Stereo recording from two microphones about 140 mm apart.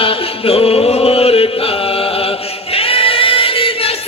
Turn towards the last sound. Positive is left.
turn(degrees=40)  # may be behind; listen again after turning